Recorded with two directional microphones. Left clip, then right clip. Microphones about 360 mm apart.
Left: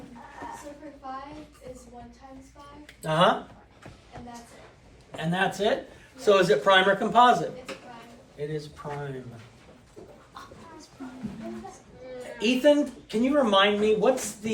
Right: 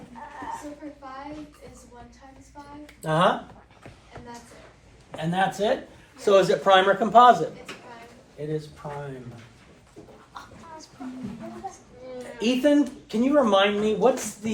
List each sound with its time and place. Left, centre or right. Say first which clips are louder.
2.8 s speech: even; centre
5.1 s speech: right 2 dB; centre
12.4 s speech: even; centre